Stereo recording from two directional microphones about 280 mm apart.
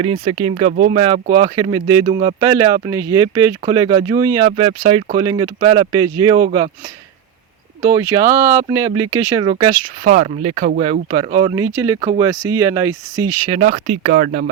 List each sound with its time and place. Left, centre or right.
0.0 s speech: centre
7.8 s speech: centre
10.0 s speech: right